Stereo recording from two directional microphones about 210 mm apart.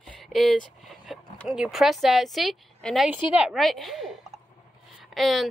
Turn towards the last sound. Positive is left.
turn(degrees=0)  # may be behind; listen again after turning